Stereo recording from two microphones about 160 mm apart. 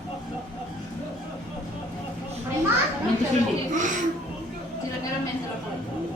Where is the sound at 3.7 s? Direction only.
55° right (ahead or behind).